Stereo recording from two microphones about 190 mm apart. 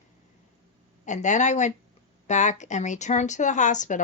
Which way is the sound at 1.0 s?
40° left (ahead or behind).